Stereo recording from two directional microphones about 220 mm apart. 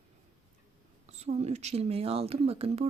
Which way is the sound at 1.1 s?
30° right (ahead or behind).